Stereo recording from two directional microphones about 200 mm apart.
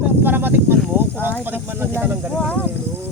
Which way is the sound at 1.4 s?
10° right (ahead or behind).